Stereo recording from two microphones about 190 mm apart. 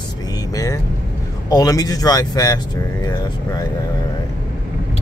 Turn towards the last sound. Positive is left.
turn(degrees=20)  # may be behind; listen again after turning